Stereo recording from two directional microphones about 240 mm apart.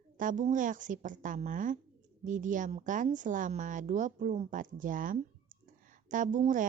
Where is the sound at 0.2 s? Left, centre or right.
Right.